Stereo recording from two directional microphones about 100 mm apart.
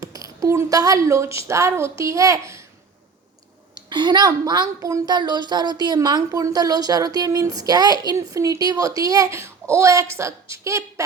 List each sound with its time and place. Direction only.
0.0 s speech: 35° right (ahead or behind)
3.8 s a woman's voice: 50° right (ahead or behind); by 5.1 s 35° right (ahead or behind)
5.1 s a woman's voice: 45° right (ahead or behind); by 11.0 s 30° right (ahead or behind)